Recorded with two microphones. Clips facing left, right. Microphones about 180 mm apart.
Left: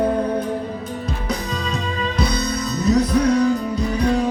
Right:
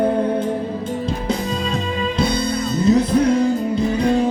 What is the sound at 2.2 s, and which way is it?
Music, 25° right (ahead or behind).